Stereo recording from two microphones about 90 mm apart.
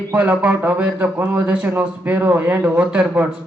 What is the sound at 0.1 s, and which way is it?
A man's voice, 20° right (ahead or behind).